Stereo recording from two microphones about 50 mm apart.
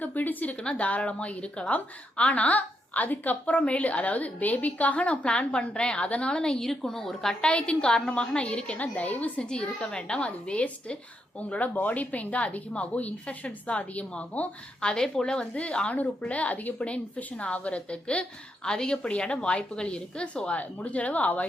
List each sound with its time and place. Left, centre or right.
0.0 s a woman's voice: left
0.5 s a woman's voice: left
9.4 s a woman's voice: centre
14.8 s a woman's voice: centre